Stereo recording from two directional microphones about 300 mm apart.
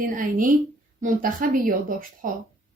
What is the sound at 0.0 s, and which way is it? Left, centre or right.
A woman's voice, right.